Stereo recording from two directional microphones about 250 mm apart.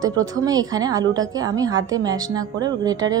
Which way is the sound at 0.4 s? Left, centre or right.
Centre.